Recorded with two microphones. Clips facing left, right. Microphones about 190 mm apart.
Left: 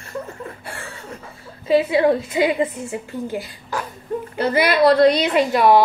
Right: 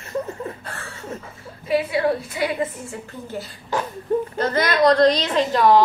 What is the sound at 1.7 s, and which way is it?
A woman's voice, 25° left (ahead or behind).